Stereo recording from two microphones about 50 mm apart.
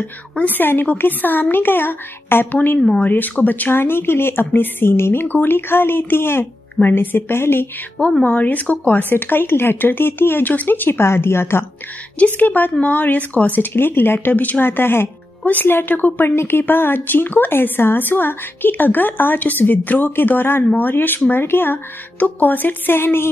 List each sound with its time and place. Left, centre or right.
0.4 s speech: left
3.7 s speech: left
8.0 s speech: left
9.1 s speech: left
12.4 s speech: left
16.3 s speech: left